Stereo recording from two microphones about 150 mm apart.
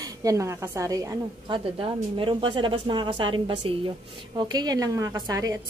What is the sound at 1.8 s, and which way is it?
A woman's voice, 35° right (ahead or behind).